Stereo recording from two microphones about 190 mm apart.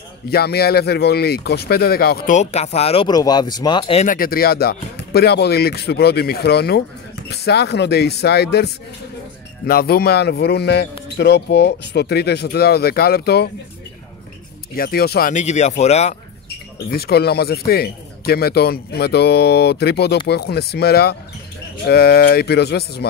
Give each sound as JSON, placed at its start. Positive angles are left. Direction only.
{"t": 0.3, "sound": "speech", "side_deg": 55}
{"t": 2.3, "sound": "speech", "side_deg": 35}
{"t": 4.0, "sound": "speech", "side_deg": 45}
{"t": 14.7, "sound": "speech", "side_deg": 55}
{"t": 16.4, "sound": "speech", "side_deg": 55}